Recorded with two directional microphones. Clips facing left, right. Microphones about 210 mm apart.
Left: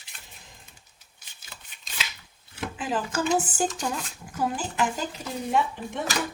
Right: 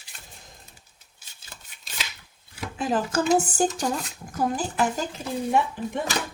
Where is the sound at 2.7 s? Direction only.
40° right (ahead or behind).